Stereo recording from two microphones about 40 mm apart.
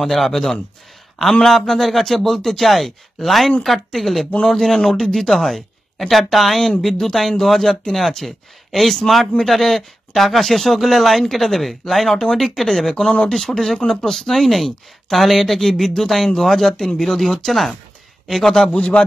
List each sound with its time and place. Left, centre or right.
0.0 s speech: centre
12.9 s speech: left
13.3 s speech: centre
16.7 s speech: centre
18.7 s speech: left